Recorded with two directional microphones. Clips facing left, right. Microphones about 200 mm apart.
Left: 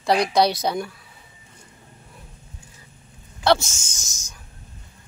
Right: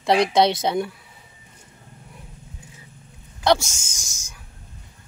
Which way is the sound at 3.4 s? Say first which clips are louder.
Even; 15° right (ahead or behind).